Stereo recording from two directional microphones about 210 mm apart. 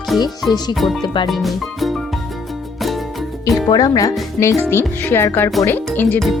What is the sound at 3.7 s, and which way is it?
Speech, 15° left (ahead or behind).